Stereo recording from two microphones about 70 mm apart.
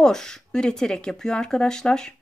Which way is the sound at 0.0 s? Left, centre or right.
Centre.